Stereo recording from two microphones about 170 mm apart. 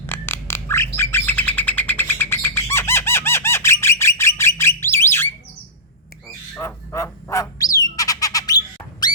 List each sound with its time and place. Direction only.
0.0 s squawk: 15° left (ahead or behind)
0.9 s bird: 15° left (ahead or behind)
6.5 s bird: 15° left (ahead or behind)